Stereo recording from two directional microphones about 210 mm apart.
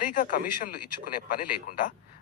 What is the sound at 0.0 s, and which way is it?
Speech, 40° left (ahead or behind).